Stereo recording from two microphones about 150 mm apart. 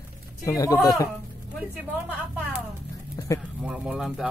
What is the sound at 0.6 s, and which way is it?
Speech, 25° left (ahead or behind).